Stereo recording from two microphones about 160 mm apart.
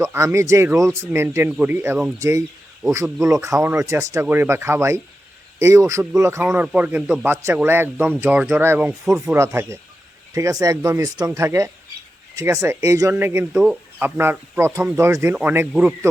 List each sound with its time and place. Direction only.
0.0 s speech: 15° right (ahead or behind)
9.0 s speech: 5° right (ahead or behind)
9.3 s speech: 15° right (ahead or behind)